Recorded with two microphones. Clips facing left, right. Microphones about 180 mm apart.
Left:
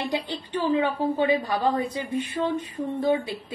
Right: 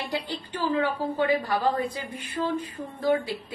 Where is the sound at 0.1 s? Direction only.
25° left (ahead or behind).